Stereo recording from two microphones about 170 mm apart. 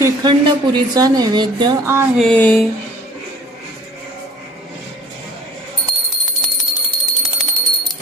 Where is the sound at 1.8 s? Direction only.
15° right (ahead or behind).